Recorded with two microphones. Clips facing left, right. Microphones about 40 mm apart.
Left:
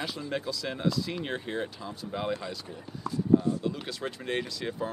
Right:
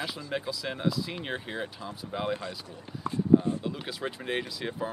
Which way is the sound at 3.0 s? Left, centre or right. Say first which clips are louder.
Right 1 dB; right.